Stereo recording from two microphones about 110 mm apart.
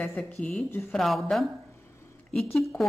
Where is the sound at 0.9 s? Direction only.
Centre (ahead or behind).